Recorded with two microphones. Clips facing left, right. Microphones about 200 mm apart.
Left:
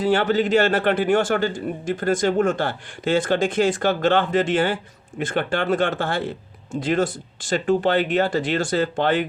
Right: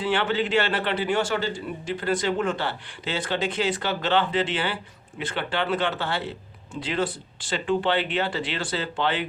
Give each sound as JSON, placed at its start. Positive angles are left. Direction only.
{"t": 0.0, "sound": "a man's voice", "side_deg": 40}